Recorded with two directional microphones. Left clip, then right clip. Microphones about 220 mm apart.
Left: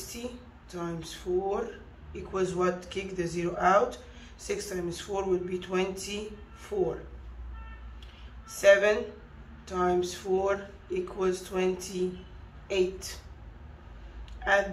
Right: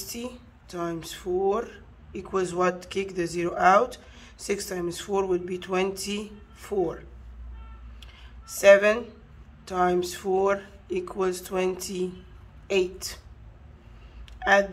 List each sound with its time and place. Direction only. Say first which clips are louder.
0.1 s speech: right 3 dB; 20° right (ahead or behind)
8.5 s speech: right 4 dB; 20° right (ahead or behind)
14.4 s telephone dialing: right 5 dB; 20° right (ahead or behind)